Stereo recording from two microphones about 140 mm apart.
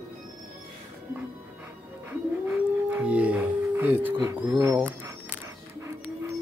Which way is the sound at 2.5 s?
10° right (ahead or behind).